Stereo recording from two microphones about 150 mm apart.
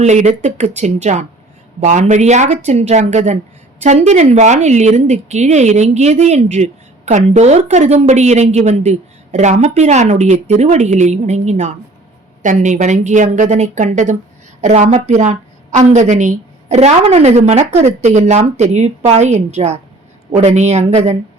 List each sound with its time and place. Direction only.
0.0 s a woman's voice: 50° right (ahead or behind)